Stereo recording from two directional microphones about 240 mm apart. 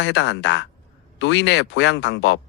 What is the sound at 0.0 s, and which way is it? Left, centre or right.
Speech, left.